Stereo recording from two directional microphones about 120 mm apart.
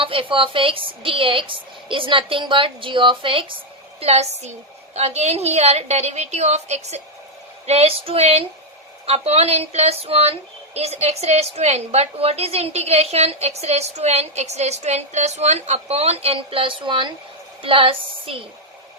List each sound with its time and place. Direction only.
0.0 s a woman's voice: 45° right (ahead or behind)
4.0 s a woman's voice: 60° right (ahead or behind)
7.7 s a woman's voice: 55° right (ahead or behind)